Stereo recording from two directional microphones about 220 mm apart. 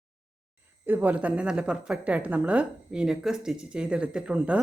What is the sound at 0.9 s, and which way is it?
A woman's voice, 10° right (ahead or behind).